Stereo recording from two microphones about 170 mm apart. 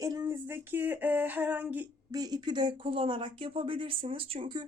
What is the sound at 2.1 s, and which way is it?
Speech, 20° right (ahead or behind).